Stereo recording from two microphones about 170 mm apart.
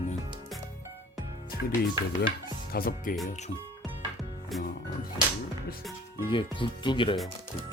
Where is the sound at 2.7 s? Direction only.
60° left (ahead or behind).